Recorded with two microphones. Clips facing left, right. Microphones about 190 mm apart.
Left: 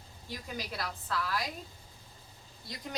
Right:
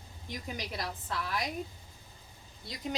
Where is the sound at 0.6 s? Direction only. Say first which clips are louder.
Left 2 dB; 20° right (ahead or behind).